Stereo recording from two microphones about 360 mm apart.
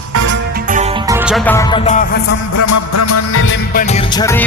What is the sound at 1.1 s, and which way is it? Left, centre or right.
Music, centre.